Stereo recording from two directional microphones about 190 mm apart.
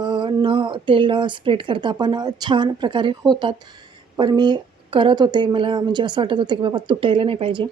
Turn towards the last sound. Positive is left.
turn(degrees=-30)  # may be behind; listen again after turning